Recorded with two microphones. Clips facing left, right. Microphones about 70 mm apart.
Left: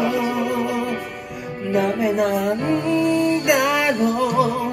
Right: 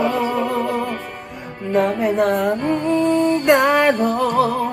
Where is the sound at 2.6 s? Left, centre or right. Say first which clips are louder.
Right 1 dB; right.